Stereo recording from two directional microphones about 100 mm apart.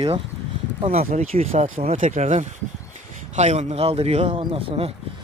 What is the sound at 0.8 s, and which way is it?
Speech, 90° right.